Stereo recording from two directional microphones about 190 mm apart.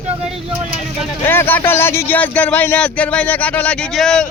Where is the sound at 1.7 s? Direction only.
10° left (ahead or behind).